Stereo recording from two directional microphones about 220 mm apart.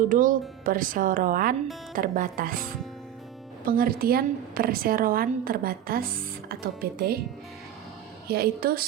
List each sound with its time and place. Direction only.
0.1 s speech: 35° right (ahead or behind)
3.7 s speech: 40° right (ahead or behind)
8.3 s speech: 45° right (ahead or behind)